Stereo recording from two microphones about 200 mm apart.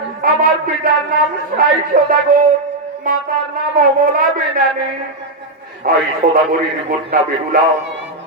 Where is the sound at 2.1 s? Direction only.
45° right (ahead or behind).